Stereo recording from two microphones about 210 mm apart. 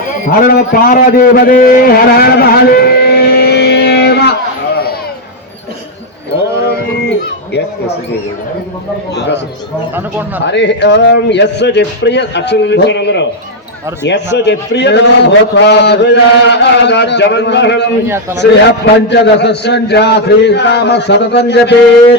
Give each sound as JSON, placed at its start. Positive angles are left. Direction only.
{"t": 0.3, "sound": "a man's voice", "side_deg": 40}
{"t": 7.0, "sound": "a sound", "side_deg": 55}
{"t": 9.1, "sound": "a man's voice", "side_deg": 55}
{"t": 9.9, "sound": "speech", "side_deg": -10}
{"t": 10.4, "sound": "a man's voice", "side_deg": 55}
{"t": 18.1, "sound": "speech", "side_deg": -10}
{"t": 18.6, "sound": "a man's voice", "side_deg": 55}